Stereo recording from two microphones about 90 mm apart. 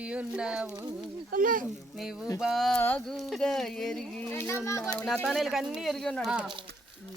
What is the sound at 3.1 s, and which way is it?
Speech, centre (ahead or behind).